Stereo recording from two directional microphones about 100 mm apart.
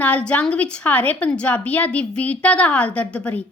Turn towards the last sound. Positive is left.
turn(degrees=15)  # may be behind; listen again after turning